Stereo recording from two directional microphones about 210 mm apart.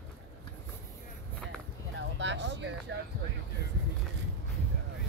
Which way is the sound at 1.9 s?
60° right (ahead or behind).